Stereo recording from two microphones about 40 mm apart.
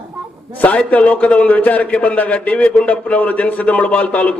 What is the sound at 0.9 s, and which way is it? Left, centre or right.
A man's voice, left.